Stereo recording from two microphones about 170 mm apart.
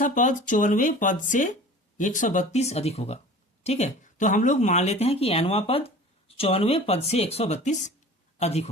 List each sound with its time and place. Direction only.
0.0 s speech: 45° left (ahead or behind)